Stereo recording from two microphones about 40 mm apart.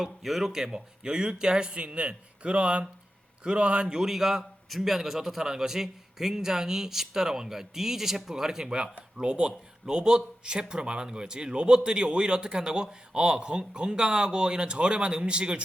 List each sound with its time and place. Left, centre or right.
0.0 s a man's voice: centre; by 15.6 s right